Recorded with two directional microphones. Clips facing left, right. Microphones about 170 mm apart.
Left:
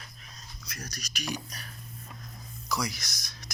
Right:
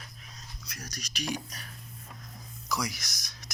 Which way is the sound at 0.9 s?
20° right (ahead or behind).